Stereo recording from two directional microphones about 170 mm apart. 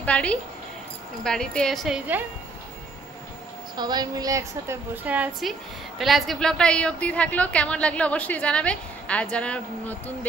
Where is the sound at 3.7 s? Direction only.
25° right (ahead or behind).